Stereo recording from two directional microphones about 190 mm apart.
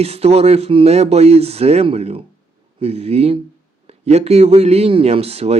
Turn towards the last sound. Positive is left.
turn(degrees=-35)  # may be behind; listen again after turning